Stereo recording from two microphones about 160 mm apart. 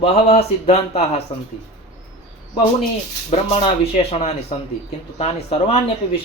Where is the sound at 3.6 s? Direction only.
35° left (ahead or behind).